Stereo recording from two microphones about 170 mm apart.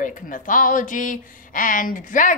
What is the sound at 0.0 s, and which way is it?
A child's voice, 50° left (ahead or behind).